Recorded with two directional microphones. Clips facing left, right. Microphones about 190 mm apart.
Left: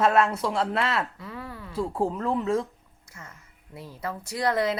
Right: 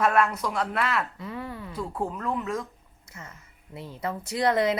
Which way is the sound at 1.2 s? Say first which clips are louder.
Right 3 dB; 20° right (ahead or behind).